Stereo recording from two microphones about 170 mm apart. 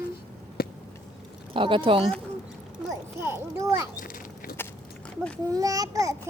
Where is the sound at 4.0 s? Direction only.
55° left (ahead or behind).